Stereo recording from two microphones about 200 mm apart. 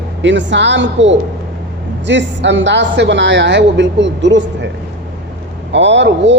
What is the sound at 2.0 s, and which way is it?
A woman's voice, 60° right (ahead or behind).